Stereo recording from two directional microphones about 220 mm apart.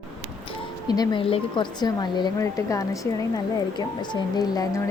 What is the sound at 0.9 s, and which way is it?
A woman's voice, 20° left (ahead or behind).